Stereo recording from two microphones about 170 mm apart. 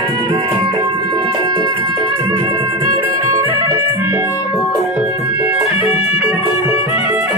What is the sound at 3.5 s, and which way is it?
Music, 15° right (ahead or behind).